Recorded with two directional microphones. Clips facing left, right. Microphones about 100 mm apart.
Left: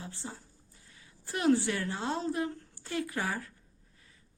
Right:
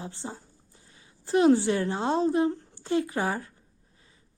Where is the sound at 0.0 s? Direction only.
25° right (ahead or behind).